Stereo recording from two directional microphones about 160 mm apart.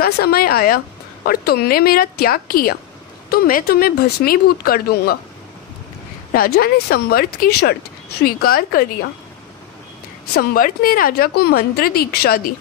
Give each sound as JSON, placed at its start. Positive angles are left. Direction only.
{"t": 0.0, "sound": "a woman's voice", "side_deg": 70}
{"t": 6.3, "sound": "a woman's voice", "side_deg": 70}
{"t": 8.2, "sound": "a woman's voice", "side_deg": 70}
{"t": 10.3, "sound": "a woman's voice", "side_deg": 65}